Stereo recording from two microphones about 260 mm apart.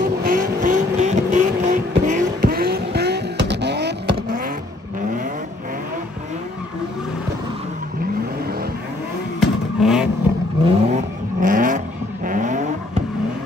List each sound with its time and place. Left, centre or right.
0.0 s vehicle: right
9.4 s vehicle: centre
10.6 s vehicle: right